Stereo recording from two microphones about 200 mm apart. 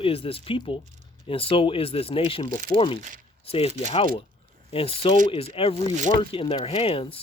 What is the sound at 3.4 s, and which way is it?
Speech, 30° left (ahead or behind).